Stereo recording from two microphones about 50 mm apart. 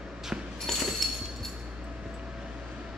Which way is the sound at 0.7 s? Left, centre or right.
Centre.